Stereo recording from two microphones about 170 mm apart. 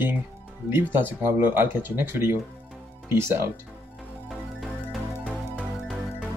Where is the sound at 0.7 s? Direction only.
15° right (ahead or behind).